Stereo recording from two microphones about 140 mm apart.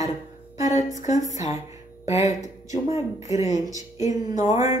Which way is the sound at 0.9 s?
60° left (ahead or behind).